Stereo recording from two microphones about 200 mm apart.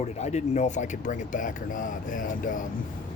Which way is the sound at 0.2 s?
35° left (ahead or behind).